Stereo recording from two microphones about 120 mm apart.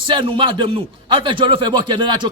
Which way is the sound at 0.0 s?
45° right (ahead or behind).